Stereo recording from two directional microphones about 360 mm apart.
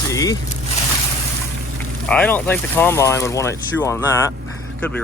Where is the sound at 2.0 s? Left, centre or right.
Centre.